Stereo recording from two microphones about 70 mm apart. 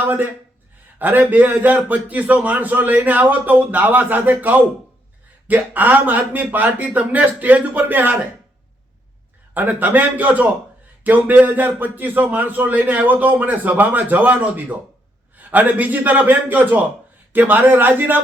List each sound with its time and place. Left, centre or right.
0.0 s speech: right
9.6 s speech: right